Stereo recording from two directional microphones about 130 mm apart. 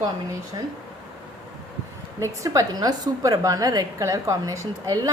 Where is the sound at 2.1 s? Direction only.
25° right (ahead or behind).